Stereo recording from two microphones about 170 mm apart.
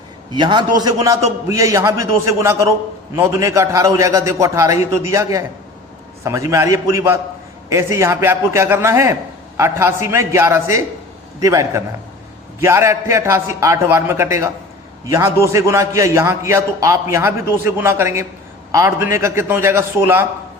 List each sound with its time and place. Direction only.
0.3 s a man's voice: 25° right (ahead or behind)